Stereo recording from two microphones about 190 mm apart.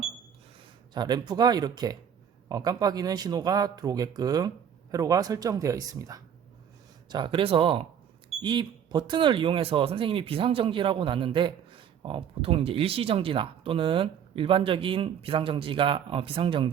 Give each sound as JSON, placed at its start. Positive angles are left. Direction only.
{"t": 0.9, "sound": "speech", "side_deg": -20}